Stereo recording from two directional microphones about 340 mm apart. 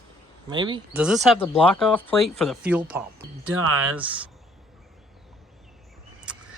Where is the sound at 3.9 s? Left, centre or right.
Centre.